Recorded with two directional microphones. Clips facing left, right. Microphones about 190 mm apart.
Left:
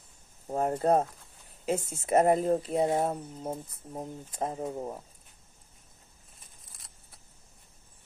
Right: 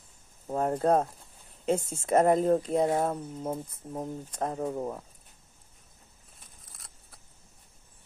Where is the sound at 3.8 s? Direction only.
15° right (ahead or behind).